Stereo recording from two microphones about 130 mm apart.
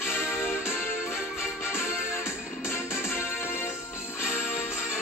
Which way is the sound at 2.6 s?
20° left (ahead or behind).